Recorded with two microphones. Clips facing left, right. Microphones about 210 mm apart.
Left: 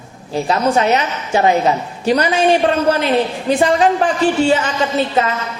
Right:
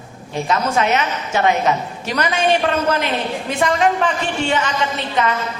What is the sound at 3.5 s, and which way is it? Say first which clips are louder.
A man's voice: left 4 dB; 35° left (ahead or behind).